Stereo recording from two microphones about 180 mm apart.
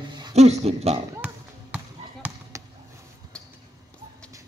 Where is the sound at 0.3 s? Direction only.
35° right (ahead or behind).